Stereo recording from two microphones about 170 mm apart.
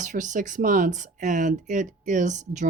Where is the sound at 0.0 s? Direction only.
50° right (ahead or behind).